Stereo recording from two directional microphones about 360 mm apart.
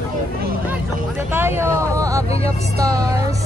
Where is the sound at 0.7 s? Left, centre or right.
Centre.